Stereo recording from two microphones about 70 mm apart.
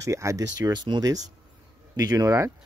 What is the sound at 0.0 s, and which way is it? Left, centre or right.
Speech, right.